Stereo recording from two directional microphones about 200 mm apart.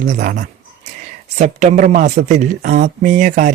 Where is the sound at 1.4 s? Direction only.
35° right (ahead or behind).